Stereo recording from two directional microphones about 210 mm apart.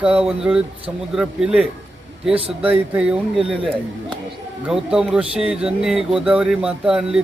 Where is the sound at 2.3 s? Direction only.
30° right (ahead or behind).